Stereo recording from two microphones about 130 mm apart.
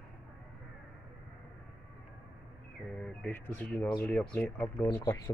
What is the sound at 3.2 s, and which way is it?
Speech, 15° left (ahead or behind).